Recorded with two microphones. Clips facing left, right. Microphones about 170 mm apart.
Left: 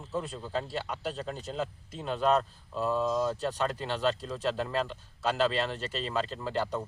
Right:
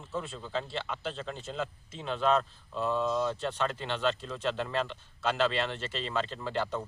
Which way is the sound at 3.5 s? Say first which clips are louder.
Left 1 dB; 40° left (ahead or behind).